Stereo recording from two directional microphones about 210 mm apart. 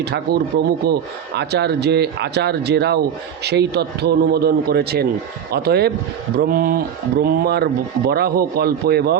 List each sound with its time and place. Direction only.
0.0 s speech: 50° right (ahead or behind)